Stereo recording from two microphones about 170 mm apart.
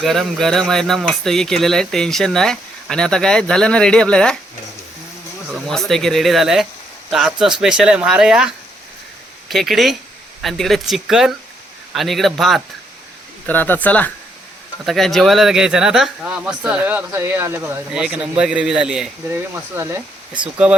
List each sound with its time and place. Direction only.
0.0 s speech: centre (ahead or behind)
5.5 s speech: centre (ahead or behind)
9.5 s speech: centre (ahead or behind)
13.5 s speech: 10° left (ahead or behind)
19.7 s speech: 15° right (ahead or behind)